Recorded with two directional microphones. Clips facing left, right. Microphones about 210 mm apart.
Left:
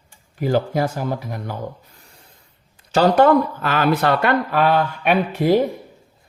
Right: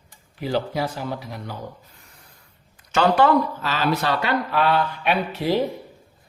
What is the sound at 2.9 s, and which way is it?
Speech, 40° left (ahead or behind).